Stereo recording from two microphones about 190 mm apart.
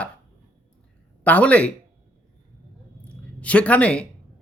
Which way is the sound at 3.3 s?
5° left (ahead or behind).